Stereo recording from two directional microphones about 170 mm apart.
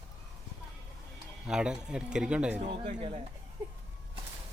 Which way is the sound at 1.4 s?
5° right (ahead or behind).